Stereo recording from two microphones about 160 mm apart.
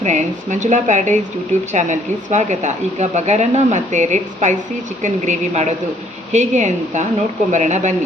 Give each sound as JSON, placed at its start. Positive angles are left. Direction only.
{"t": 0.0, "sound": "a woman's voice", "side_deg": -50}